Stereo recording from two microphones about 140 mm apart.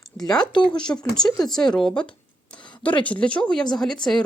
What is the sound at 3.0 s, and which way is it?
Speech, 10° left (ahead or behind).